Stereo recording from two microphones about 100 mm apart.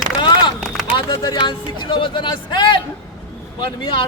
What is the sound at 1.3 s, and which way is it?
A man's voice, 50° left (ahead or behind).